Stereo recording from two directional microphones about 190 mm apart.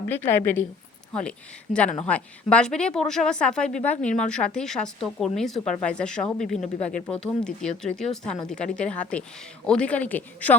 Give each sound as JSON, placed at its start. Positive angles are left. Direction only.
{"t": 0.3, "sound": "speech", "side_deg": 10}
{"t": 1.7, "sound": "a woman's voice", "side_deg": 5}